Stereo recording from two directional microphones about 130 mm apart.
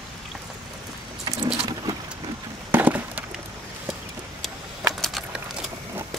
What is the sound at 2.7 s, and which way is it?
Chop, 15° right (ahead or behind).